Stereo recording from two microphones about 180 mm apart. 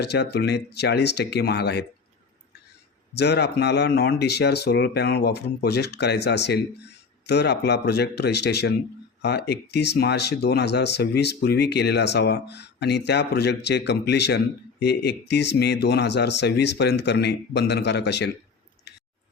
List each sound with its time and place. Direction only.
0.0 s speech: 65° left (ahead or behind)
3.2 s speech: 70° left (ahead or behind)